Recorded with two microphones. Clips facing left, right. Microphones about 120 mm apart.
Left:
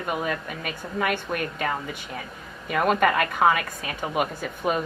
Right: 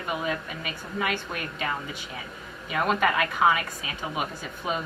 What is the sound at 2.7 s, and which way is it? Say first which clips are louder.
A woman's voice: left 3 dB; 50° left (ahead or behind).